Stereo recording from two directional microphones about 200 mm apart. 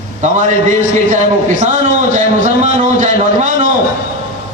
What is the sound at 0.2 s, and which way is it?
A man's voice, 35° right (ahead or behind).